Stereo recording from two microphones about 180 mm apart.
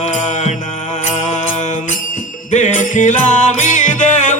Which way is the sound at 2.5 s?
45° left (ahead or behind).